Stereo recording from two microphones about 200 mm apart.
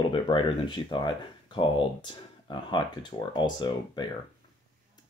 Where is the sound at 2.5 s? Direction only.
25° left (ahead or behind).